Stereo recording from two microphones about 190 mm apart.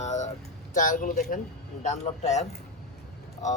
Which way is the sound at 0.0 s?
35° left (ahead or behind).